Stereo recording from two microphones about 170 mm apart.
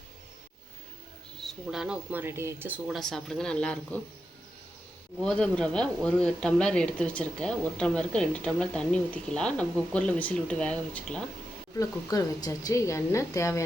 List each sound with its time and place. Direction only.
1.4 s speech: centre (ahead or behind)
5.2 s speech: 5° left (ahead or behind)
11.8 s a woman's voice: 20° left (ahead or behind)